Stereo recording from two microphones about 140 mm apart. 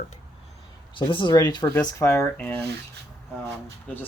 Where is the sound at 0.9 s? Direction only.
35° left (ahead or behind); by 2.5 s 15° left (ahead or behind).